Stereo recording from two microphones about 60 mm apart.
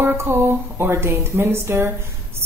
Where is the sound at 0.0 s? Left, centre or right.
Right.